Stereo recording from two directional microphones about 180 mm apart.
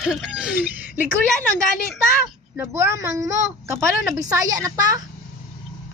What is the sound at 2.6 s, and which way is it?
A woman's voice, 15° right (ahead or behind).